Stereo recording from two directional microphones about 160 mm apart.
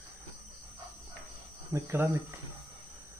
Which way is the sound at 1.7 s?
15° right (ahead or behind).